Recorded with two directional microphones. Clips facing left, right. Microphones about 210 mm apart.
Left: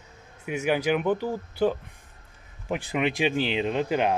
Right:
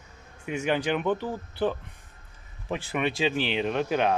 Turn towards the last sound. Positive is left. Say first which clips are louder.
# left 1 dB
turn(degrees=15)  # may be behind; listen again after turning